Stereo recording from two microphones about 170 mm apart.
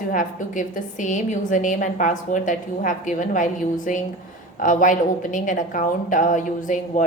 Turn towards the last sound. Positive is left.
turn(degrees=50)  # may be behind; listen again after turning